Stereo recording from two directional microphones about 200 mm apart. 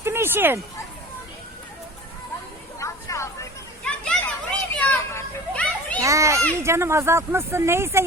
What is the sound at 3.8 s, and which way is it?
Children playing, 5° left (ahead or behind).